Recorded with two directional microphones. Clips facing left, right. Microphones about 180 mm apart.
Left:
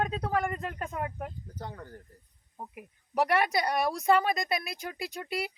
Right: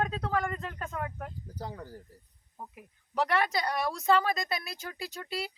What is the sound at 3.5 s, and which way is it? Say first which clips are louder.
Speech: left 3 dB; 20° left (ahead or behind).